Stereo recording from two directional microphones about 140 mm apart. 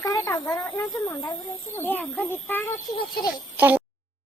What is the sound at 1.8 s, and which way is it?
Speech, 10° left (ahead or behind).